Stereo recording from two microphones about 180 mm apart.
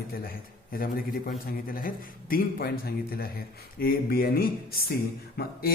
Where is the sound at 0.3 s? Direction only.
55° left (ahead or behind).